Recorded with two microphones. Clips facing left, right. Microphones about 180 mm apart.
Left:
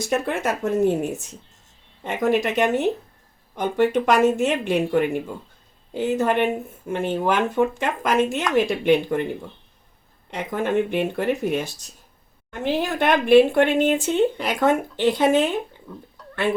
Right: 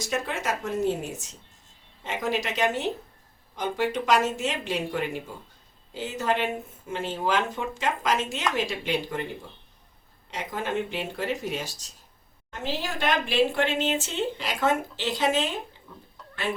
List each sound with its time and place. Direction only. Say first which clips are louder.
0.0 s speech: left 6 dB; 55° left (ahead or behind)
10.3 s speech: left 7 dB; 55° left (ahead or behind)